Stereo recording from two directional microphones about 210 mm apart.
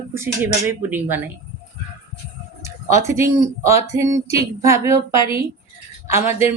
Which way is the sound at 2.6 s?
15° right (ahead or behind).